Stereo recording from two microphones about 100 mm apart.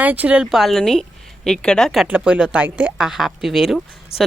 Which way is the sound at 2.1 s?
15° right (ahead or behind).